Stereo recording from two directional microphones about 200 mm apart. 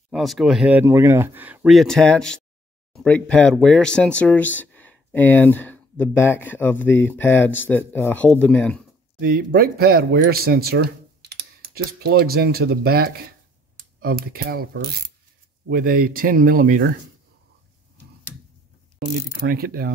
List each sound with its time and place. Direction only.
0.1 s speech: centre (ahead or behind)
9.2 s speech: 50° right (ahead or behind)
18.9 s speech: 55° right (ahead or behind)